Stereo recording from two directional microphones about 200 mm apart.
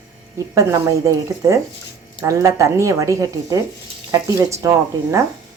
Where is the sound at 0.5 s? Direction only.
15° right (ahead or behind).